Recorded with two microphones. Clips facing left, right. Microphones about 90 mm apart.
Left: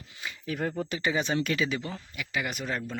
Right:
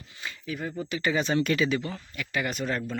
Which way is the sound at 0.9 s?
15° left (ahead or behind).